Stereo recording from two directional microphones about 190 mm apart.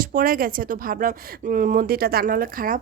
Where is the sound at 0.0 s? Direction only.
45° right (ahead or behind).